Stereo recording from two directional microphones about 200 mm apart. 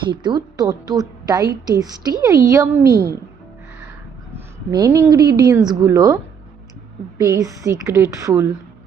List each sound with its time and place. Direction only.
0.1 s a woman's voice: 20° right (ahead or behind)
4.7 s a woman's voice: 15° right (ahead or behind)
7.2 s a woman's voice: 15° right (ahead or behind)